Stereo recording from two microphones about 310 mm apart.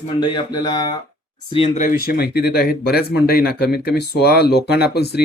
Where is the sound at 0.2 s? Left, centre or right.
Centre.